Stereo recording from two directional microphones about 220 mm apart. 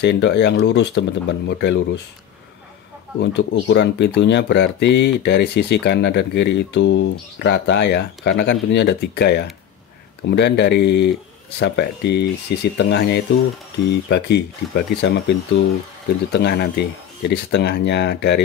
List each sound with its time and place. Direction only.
0.0 s speech: 50° left (ahead or behind)
3.2 s speech: 55° left (ahead or behind)